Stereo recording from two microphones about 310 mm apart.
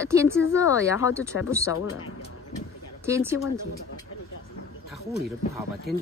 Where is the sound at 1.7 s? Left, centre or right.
Left.